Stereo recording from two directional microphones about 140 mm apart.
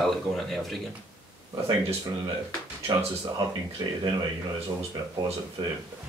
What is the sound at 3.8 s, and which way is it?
Speech, 25° right (ahead or behind).